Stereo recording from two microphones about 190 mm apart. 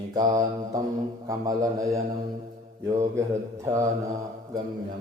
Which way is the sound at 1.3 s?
20° right (ahead or behind).